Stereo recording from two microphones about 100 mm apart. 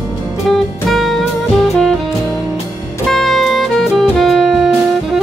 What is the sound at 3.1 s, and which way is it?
Music, centre (ahead or behind).